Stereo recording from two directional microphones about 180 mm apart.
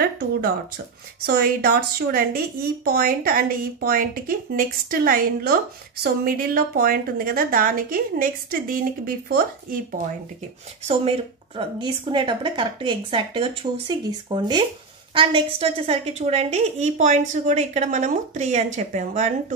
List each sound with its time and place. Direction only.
1.2 s a woman's voice: 60° right (ahead or behind)
10.9 s a woman's voice: 30° right (ahead or behind)